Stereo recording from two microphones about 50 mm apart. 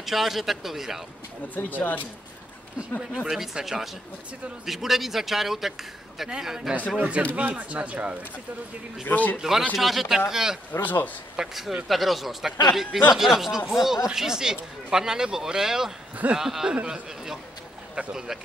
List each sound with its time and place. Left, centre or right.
0.0 s a man's voice: centre
1.5 s speech: left
3.3 s a man's voice: centre
7.0 s speech: right
9.0 s speech: left
9.4 s speech: centre
10.7 s speech: left
11.3 s a man's voice: centre